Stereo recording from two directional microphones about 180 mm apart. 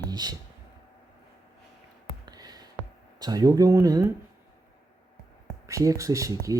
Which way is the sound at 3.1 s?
20° right (ahead or behind).